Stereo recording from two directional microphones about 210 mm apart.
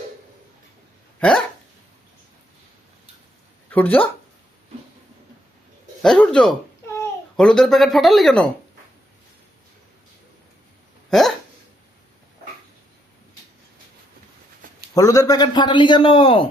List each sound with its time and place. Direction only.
1.2 s speech: 5° left (ahead or behind)
3.7 s speech: 10° left (ahead or behind)
6.0 s speech: 5° left (ahead or behind)
11.1 s hiccup: centre (ahead or behind)
14.9 s a man's voice: 15° left (ahead or behind)